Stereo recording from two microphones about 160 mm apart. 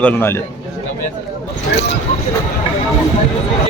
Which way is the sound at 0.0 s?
10° left (ahead or behind).